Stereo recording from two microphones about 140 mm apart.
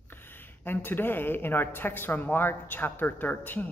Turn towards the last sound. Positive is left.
turn(degrees=15)  # may be behind; listen again after turning